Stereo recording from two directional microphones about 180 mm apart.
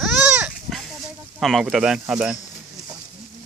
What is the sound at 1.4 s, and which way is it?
Speech, centre (ahead or behind).